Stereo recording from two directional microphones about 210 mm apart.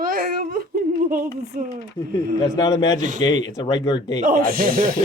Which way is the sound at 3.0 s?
35° right (ahead or behind).